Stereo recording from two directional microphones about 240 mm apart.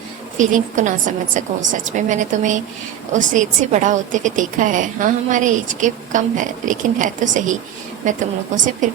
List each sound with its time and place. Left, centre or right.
0.3 s a woman's voice: right